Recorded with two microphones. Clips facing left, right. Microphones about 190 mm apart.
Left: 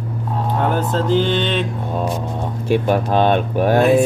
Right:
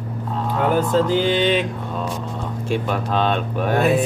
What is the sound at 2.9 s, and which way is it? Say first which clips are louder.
Speech: left 5 dB; 55° left (ahead or behind).